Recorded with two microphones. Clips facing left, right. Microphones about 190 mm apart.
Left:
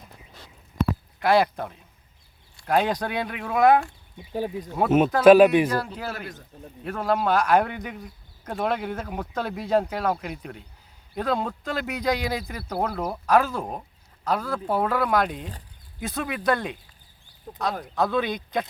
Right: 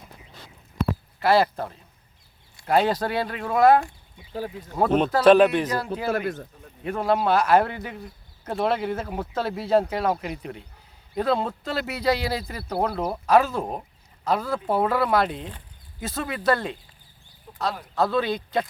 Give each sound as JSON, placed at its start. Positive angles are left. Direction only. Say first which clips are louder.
{"t": 1.2, "sound": "speech", "louder": "right 1 dB", "side_deg": -5}
{"t": 4.3, "sound": "speech", "louder": "left 3 dB", "side_deg": 15}
{"t": 4.7, "sound": "speech", "louder": "even", "side_deg": 5}
{"t": 6.1, "sound": "speech", "louder": "right 9 dB", "side_deg": -55}
{"t": 6.9, "sound": "speech", "louder": "right 1 dB", "side_deg": -5}
{"t": 17.5, "sound": "a sound", "louder": "left 5 dB", "side_deg": 45}
{"t": 17.9, "sound": "speech", "louder": "right 1 dB", "side_deg": 0}